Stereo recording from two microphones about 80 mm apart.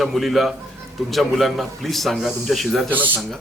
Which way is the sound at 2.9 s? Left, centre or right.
Right.